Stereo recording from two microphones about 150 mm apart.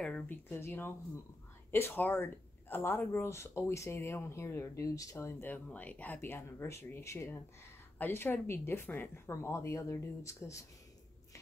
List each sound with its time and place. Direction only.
0.0 s speech: 10° left (ahead or behind)